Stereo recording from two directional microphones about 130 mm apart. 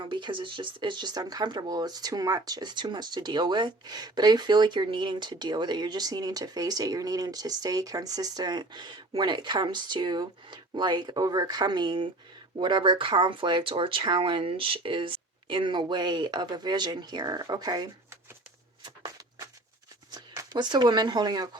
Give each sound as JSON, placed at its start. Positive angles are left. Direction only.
{"t": 0.0, "sound": "speech", "side_deg": -40}
{"t": 18.8, "sound": "a sound", "side_deg": -30}
{"t": 20.1, "sound": "speech", "side_deg": -30}